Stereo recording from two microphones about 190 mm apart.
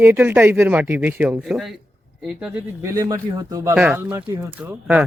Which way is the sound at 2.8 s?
15° right (ahead or behind).